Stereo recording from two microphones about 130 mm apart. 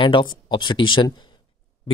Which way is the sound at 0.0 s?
40° left (ahead or behind).